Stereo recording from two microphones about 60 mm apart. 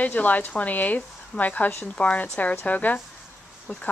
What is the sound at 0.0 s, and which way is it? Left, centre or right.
Speech, left.